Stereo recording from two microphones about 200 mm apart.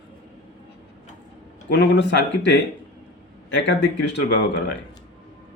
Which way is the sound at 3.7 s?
60° left (ahead or behind).